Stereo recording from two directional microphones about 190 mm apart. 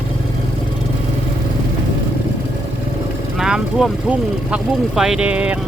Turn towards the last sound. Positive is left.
turn(degrees=-5)  # may be behind; listen again after turning